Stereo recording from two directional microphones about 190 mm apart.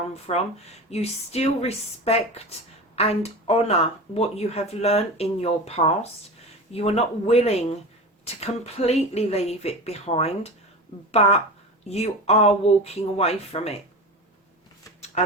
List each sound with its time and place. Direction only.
0.3 s speech: 35° left (ahead or behind)